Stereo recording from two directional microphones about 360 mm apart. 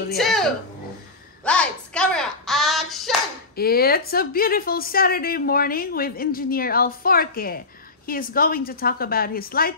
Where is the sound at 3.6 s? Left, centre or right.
Left.